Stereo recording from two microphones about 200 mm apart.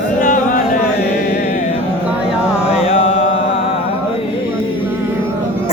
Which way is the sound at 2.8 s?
30° left (ahead or behind).